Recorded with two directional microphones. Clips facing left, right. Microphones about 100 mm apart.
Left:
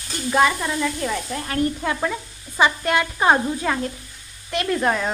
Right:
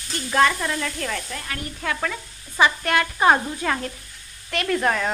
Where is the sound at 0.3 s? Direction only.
10° left (ahead or behind).